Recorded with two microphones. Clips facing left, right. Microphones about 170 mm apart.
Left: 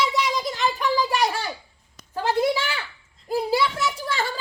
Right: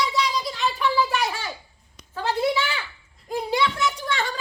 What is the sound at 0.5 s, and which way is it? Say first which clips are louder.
Speech: even; 45° left (ahead or behind).